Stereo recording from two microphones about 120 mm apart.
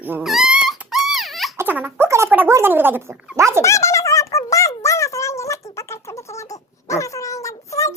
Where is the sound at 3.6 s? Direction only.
25° left (ahead or behind).